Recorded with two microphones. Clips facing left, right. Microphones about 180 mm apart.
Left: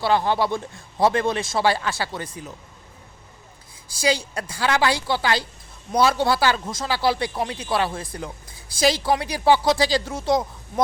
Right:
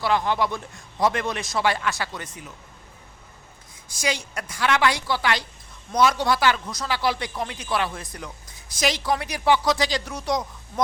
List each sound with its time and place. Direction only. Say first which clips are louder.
0.0 s speech: left 2 dB; 30° left (ahead or behind)
3.8 s speech: left 5 dB; 30° left (ahead or behind)